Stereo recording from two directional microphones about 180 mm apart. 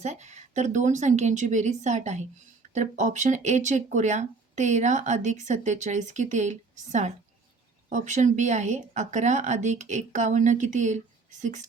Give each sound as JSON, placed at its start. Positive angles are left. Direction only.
{"t": 0.0, "sound": "speech", "side_deg": -40}